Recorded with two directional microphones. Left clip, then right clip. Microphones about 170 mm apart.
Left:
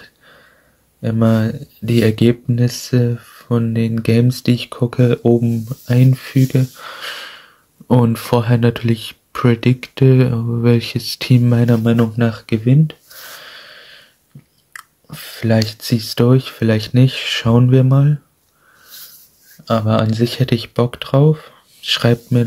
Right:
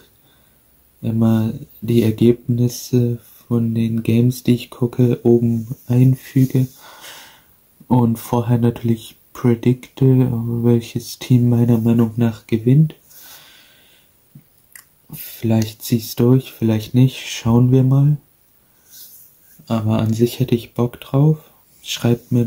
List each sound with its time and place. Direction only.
1.0 s speech: 15° left (ahead or behind)
13.4 s a sound: 10° left (ahead or behind)
14.7 s speech: 5° left (ahead or behind)
19.6 s speech: 10° left (ahead or behind)